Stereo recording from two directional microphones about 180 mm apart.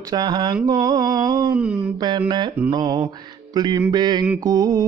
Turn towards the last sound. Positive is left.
turn(degrees=-20)  # may be behind; listen again after turning